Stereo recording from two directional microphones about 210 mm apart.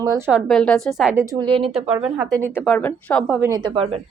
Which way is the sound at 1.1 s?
15° right (ahead or behind).